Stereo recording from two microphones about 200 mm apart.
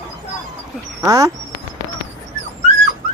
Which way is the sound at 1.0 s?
15° right (ahead or behind).